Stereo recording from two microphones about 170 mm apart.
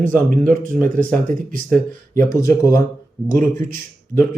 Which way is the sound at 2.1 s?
15° left (ahead or behind).